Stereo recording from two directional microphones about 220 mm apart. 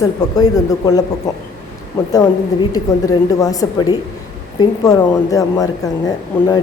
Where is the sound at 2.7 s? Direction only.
15° left (ahead or behind).